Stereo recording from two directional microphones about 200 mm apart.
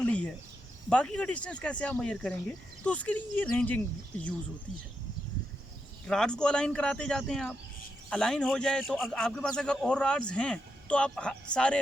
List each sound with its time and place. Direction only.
0.0 s a sound: 5° left (ahead or behind)
0.9 s speech: 5° left (ahead or behind)
6.1 s speech: 5° left (ahead or behind)